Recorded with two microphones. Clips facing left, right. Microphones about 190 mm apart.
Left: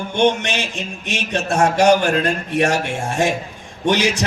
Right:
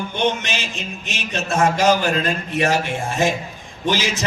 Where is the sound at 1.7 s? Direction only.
65° left (ahead or behind).